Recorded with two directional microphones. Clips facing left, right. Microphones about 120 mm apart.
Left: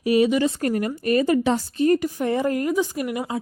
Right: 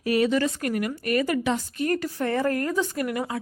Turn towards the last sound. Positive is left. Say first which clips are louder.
# left 1 dB
turn(degrees=20)  # may be behind; listen again after turning